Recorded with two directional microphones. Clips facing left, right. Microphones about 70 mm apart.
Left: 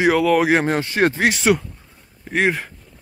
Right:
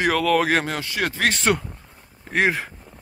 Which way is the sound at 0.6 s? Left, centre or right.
Left.